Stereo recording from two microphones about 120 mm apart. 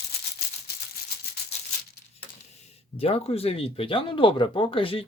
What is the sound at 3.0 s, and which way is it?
Speech, 55° left (ahead or behind).